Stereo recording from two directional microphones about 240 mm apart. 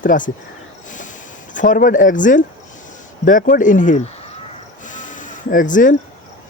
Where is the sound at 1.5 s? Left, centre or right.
Left.